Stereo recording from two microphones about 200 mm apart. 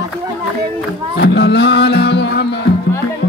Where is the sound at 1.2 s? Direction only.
55° left (ahead or behind).